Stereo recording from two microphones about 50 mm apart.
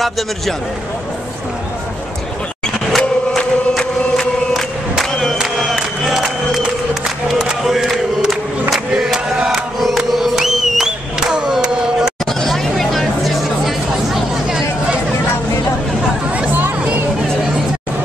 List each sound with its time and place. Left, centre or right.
3.0 s chant: centre
5.8 s music: centre
7.4 s a sound: centre
8.7 s crowd: centre
11.5 s a sound: centre
12.4 s music: centre
16.5 s music: right